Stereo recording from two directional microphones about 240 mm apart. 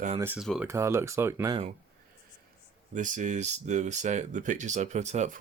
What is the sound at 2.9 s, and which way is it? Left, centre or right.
Speech, right.